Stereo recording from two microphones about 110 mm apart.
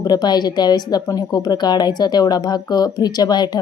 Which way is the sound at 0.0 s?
40° left (ahead or behind).